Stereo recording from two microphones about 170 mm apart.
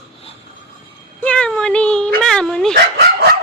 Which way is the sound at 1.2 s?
5° left (ahead or behind).